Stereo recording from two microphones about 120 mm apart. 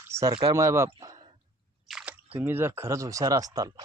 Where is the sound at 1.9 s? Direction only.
10° right (ahead or behind); by 3.7 s 30° right (ahead or behind).